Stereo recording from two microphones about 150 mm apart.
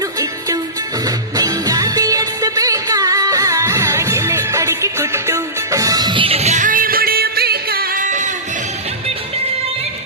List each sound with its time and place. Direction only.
0.2 s music: 25° right (ahead or behind); by 8.3 s 55° right (ahead or behind)